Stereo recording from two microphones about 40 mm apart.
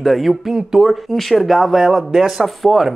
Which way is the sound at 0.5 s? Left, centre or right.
Centre.